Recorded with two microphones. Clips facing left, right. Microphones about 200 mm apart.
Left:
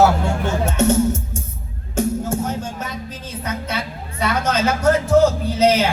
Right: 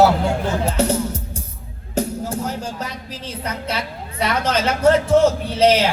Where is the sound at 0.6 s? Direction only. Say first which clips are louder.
Left 4 dB; 35° right (ahead or behind).